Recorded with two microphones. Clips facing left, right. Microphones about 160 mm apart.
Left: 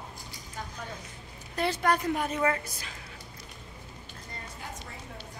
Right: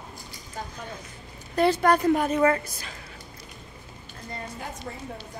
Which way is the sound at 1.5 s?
40° right (ahead or behind).